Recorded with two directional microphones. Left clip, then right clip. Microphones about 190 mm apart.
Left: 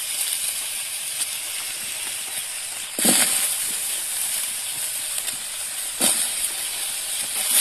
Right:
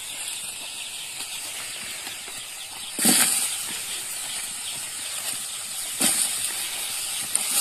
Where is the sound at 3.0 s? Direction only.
30° left (ahead or behind).